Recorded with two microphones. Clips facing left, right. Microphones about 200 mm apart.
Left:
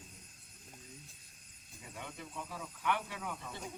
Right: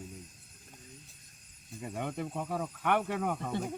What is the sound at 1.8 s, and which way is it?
Speech, 55° right (ahead or behind).